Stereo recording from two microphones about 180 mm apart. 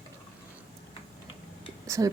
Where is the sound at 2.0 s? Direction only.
15° right (ahead or behind).